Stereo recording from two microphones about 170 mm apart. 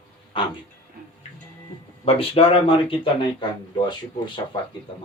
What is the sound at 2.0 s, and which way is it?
Speech, 35° left (ahead or behind).